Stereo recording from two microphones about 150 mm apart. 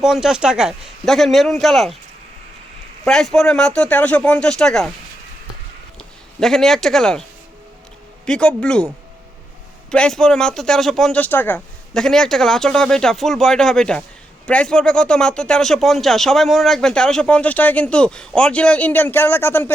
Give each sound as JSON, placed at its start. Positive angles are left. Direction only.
{"t": 0.0, "sound": "speech", "side_deg": -5}
{"t": 3.0, "sound": "speech", "side_deg": 5}
{"t": 6.0, "sound": "speech", "side_deg": 5}
{"t": 8.3, "sound": "speech", "side_deg": 5}
{"t": 9.9, "sound": "speech", "side_deg": 5}
{"t": 11.9, "sound": "speech", "side_deg": 5}